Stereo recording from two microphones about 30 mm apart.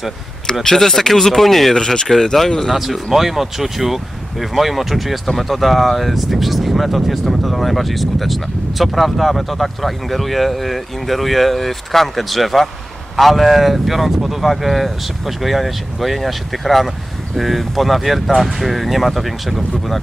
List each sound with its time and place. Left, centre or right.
0.7 s speech: centre
1.8 s speech: centre
2.7 s speech: centre